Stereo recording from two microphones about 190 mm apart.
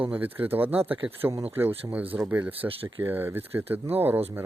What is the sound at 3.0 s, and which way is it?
Speech, 10° right (ahead or behind).